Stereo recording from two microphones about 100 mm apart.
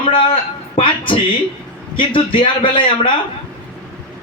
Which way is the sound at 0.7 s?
55° left (ahead or behind).